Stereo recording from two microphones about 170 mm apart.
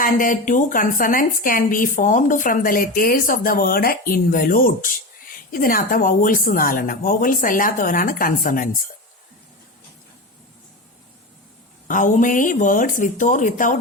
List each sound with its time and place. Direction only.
0.0 s a woman's voice: 55° left (ahead or behind)
11.9 s speech: 50° left (ahead or behind)